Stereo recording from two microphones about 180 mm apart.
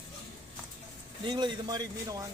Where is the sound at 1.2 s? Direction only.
25° right (ahead or behind).